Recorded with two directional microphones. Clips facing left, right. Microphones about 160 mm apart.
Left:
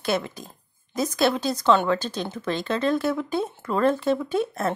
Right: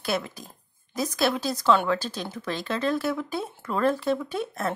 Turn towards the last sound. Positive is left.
turn(degrees=0)  # may be behind; listen again after turning